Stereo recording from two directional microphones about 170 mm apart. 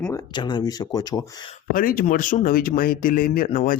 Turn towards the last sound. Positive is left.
turn(degrees=50)  # may be behind; listen again after turning